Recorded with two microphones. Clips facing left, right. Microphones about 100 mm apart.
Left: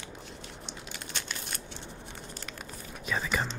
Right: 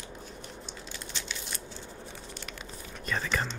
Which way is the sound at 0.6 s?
65° left (ahead or behind).